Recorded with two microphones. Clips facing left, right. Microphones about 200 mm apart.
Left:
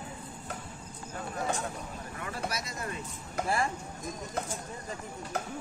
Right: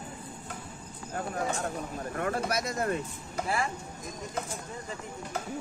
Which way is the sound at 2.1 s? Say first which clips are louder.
Right 7 dB; 50° right (ahead or behind).